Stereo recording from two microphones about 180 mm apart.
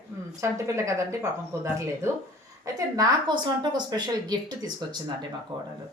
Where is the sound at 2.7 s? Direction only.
20° right (ahead or behind).